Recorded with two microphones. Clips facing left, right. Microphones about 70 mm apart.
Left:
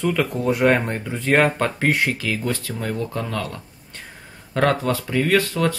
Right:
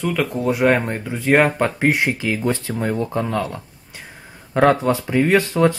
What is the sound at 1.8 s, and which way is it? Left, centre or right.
Speech, centre.